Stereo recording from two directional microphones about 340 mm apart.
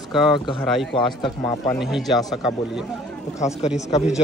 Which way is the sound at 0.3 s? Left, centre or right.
Centre.